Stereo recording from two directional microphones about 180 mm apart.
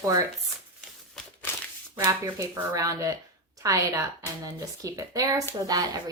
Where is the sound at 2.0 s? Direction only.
20° right (ahead or behind).